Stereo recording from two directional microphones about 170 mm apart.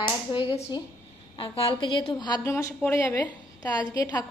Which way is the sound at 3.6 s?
25° left (ahead or behind).